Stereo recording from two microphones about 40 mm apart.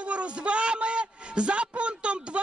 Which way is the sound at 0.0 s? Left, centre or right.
Right.